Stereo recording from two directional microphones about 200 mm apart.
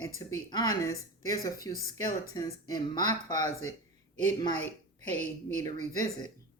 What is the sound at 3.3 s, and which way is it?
Speech, 35° right (ahead or behind).